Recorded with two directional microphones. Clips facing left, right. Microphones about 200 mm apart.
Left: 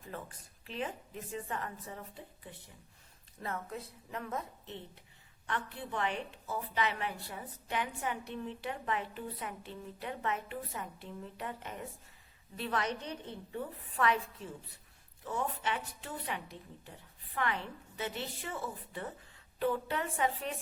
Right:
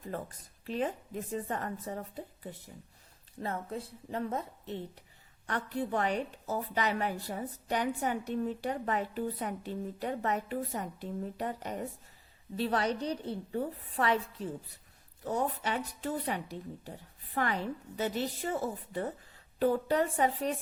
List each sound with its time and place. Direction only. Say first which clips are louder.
0.0 s a woman's voice: right 6 dB; 40° right (ahead or behind)
3.4 s a woman's voice: right 4 dB; 30° right (ahead or behind)